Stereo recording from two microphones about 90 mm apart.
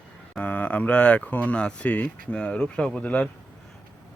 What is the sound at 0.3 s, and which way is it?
Speech, 15° left (ahead or behind).